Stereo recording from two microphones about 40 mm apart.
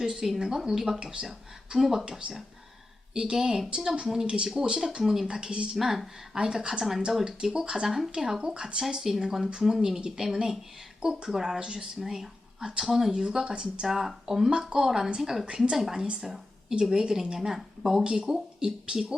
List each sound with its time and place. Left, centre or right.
0.0 s speech: centre
5.4 s speech: right
5.7 s speech: centre
6.3 s speech: centre
7.3 s speech: right
9.1 s speech: centre
9.5 s speech: centre
11.9 s speech: centre
13.2 s speech: right
13.8 s speech: centre
15.4 s speech: right
15.7 s speech: centre
16.2 s a sound: centre
16.9 s speech: centre